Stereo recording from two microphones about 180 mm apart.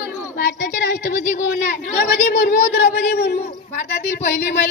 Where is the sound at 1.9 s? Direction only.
60° left (ahead or behind).